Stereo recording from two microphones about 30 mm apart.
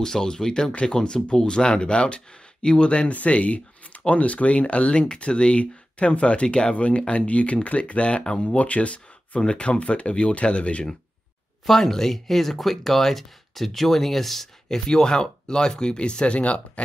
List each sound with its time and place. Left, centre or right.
0.0 s speech: left
3.1 s speech: left
6.7 s speech: left
8.2 s speech: left
8.5 s speech: left
9.4 s speech: left
11.6 s speech: centre
14.9 s speech: left